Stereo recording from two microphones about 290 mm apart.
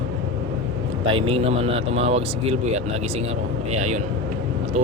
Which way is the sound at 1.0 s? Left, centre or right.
Centre.